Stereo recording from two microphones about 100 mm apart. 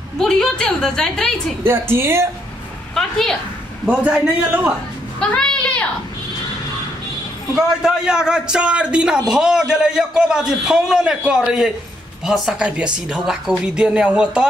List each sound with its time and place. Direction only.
0.2 s a woman's voice: 5° left (ahead or behind)
1.7 s a woman's voice: 25° right (ahead or behind)
2.9 s a woman's voice: 5° left (ahead or behind)
3.8 s a man's voice: 15° right (ahead or behind)
5.2 s a child's voice: 10° left (ahead or behind)
7.5 s a man's voice: 5° right (ahead or behind)